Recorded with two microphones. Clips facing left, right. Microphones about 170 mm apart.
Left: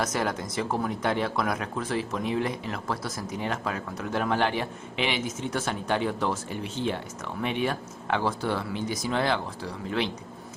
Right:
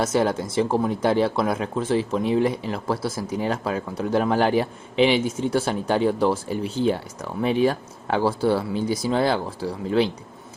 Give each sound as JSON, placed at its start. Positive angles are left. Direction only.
{"t": 0.0, "sound": "speech", "side_deg": -30}